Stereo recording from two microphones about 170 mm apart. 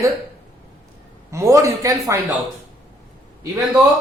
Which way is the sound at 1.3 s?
15° right (ahead or behind).